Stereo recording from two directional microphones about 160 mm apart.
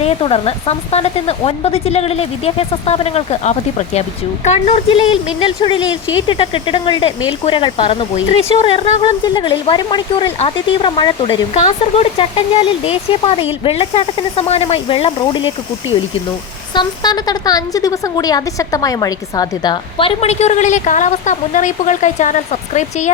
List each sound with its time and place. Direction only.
0.0 s a woman's voice: 40° left (ahead or behind)
16.7 s a woman's voice: 25° left (ahead or behind); by 23.1 s 45° left (ahead or behind)